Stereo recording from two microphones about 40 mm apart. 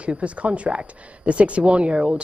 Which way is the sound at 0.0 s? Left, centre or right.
Right.